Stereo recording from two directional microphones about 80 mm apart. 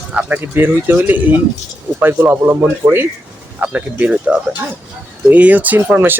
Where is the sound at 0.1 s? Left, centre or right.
Right.